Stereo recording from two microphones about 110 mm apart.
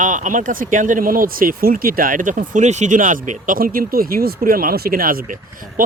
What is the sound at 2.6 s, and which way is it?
Speech, 90° right.